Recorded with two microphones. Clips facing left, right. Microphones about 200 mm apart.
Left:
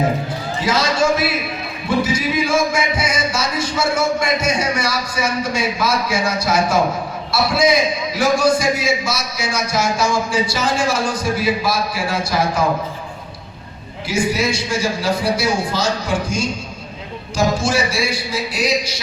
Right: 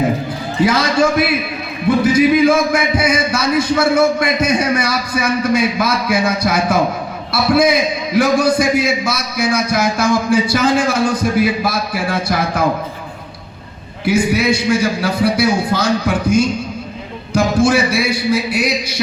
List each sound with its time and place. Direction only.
0.6 s a man's voice: 60° right (ahead or behind)
14.0 s a man's voice: 60° right (ahead or behind)